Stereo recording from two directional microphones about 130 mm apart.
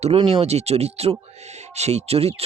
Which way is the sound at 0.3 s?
55° right (ahead or behind).